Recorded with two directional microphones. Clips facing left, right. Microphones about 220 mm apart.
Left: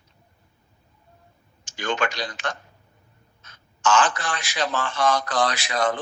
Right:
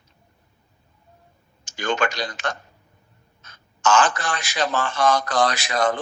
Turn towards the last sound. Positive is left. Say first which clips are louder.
# right 2 dB
turn(degrees=-45)  # may be behind; listen again after turning